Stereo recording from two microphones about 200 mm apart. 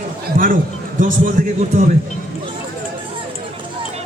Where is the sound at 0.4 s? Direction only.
45° right (ahead or behind).